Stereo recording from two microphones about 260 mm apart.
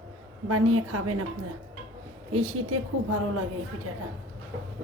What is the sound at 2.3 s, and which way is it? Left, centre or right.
A woman's voice, right.